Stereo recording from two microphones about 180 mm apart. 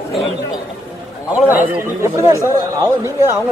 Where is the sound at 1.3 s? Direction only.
10° right (ahead or behind).